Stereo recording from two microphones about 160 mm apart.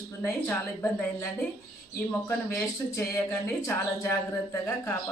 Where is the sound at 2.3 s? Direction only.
15° left (ahead or behind).